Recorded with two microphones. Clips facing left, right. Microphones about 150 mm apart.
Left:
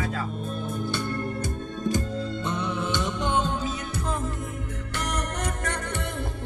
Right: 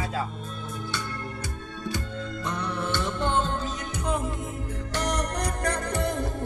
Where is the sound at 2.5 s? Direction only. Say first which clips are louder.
Even; 20° left (ahead or behind).